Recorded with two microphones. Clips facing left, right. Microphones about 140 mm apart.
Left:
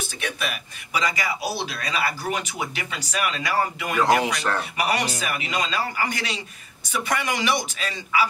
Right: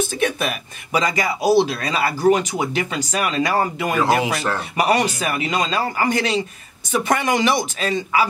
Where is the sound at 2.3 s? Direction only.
45° right (ahead or behind).